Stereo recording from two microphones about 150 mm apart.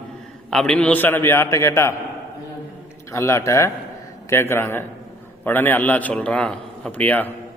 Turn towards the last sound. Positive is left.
turn(degrees=10)  # may be behind; listen again after turning